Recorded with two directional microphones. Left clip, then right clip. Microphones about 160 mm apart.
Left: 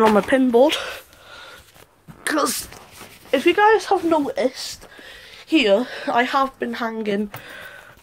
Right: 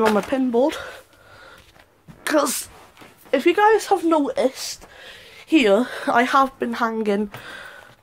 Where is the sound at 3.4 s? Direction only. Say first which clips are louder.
Left 1 dB; 35° right (ahead or behind).